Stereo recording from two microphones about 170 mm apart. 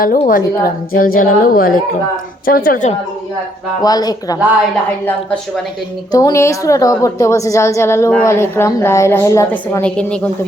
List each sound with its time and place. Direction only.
0.0 s a woman's voice: 55° left (ahead or behind)
3.8 s speech: 20° left (ahead or behind)
6.1 s a woman's voice: 20° left (ahead or behind); by 10.2 s 5° left (ahead or behind)